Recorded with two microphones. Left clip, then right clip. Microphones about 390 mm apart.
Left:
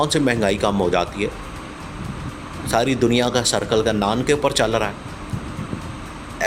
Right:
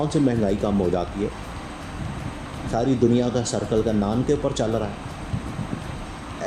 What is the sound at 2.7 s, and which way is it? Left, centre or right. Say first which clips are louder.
Speech: left 3 dB; left.